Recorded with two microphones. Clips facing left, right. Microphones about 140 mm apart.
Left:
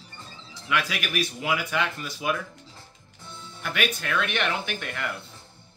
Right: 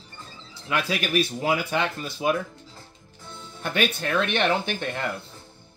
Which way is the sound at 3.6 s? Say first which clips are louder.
Right 3 dB; 30° right (ahead or behind).